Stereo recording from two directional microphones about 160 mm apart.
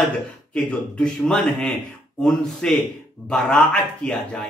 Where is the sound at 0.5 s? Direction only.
5° left (ahead or behind).